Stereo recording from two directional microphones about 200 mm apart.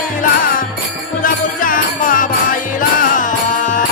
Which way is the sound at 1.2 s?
45° left (ahead or behind).